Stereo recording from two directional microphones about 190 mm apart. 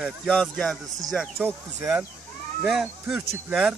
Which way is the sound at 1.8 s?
15° right (ahead or behind).